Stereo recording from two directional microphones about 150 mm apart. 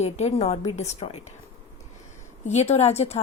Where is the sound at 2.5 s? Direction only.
45° left (ahead or behind).